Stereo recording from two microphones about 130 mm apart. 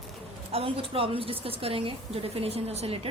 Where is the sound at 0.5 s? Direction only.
45° right (ahead or behind).